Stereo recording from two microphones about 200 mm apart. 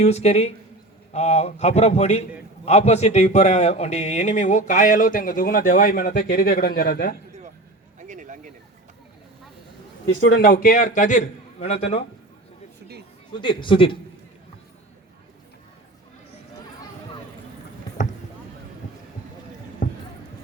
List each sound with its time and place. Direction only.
0.0 s a man's voice: 30° left (ahead or behind); by 7.2 s 50° left (ahead or behind)
7.9 s a sound: 40° right (ahead or behind)
10.2 s speech: 60° left (ahead or behind)
10.5 s a man's voice: 45° left (ahead or behind)
13.4 s a man's voice: 25° left (ahead or behind)
19.8 s a sound: 40° left (ahead or behind)